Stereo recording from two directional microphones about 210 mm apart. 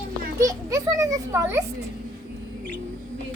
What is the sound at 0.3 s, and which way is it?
A child's voice, 15° right (ahead or behind).